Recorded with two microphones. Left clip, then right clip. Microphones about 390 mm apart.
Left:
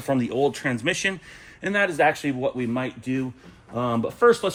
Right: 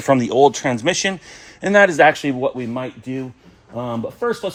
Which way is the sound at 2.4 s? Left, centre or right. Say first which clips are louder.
Right 4 dB; centre.